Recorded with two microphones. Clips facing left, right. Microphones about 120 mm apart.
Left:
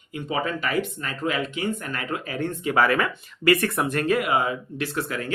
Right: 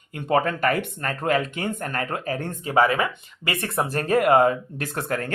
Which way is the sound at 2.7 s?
25° right (ahead or behind).